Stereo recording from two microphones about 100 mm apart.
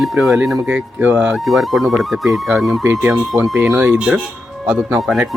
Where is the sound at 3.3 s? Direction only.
25° right (ahead or behind).